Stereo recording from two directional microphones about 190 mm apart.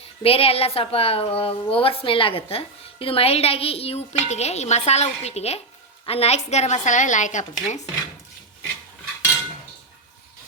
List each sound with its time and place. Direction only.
0.2 s a woman's voice: 30° left (ahead or behind)